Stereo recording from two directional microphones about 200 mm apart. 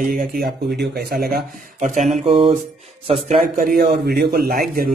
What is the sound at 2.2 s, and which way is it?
Music, 25° right (ahead or behind).